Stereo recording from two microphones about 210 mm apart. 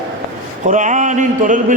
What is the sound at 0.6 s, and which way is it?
A man's voice, 35° right (ahead or behind).